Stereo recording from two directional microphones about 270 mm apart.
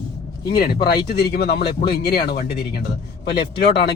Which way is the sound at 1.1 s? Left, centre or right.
Left.